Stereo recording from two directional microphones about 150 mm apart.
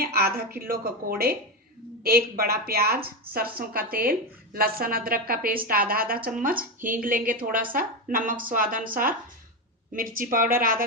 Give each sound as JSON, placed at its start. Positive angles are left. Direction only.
{"t": 0.0, "sound": "a woman's voice", "side_deg": -90}